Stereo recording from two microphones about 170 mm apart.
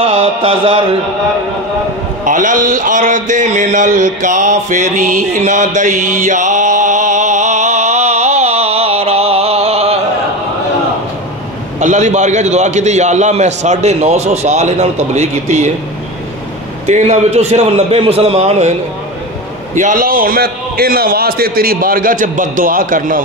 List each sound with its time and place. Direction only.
0.0 s a man's voice: 30° right (ahead or behind)
2.2 s a sound: 50° right (ahead or behind)
11.8 s a man's voice: 45° right (ahead or behind)
16.8 s a man's voice: 40° right (ahead or behind)
19.7 s a man's voice: 50° right (ahead or behind)